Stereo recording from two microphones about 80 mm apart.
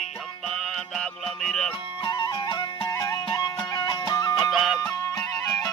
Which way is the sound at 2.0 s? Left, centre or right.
Left.